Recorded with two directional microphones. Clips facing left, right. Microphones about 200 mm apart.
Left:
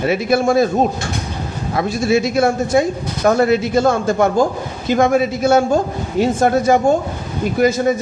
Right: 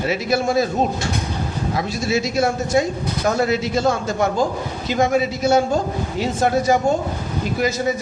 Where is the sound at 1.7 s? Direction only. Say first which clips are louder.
Left 7 dB; 55° left (ahead or behind).